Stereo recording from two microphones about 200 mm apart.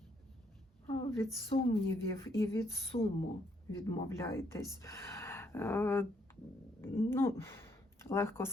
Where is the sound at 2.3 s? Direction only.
15° left (ahead or behind).